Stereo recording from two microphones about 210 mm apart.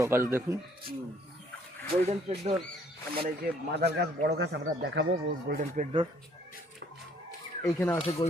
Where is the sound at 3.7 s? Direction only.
50° right (ahead or behind).